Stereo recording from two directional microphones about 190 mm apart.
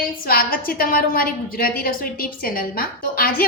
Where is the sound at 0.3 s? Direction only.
50° left (ahead or behind).